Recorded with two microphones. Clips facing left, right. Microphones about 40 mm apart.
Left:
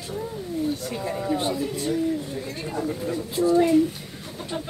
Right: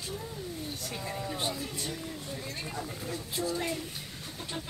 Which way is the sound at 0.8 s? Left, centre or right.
Centre.